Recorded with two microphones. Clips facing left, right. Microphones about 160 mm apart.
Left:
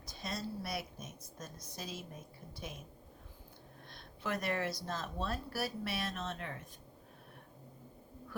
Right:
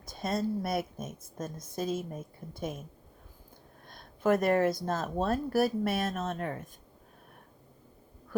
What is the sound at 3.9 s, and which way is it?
Speech, 50° right (ahead or behind).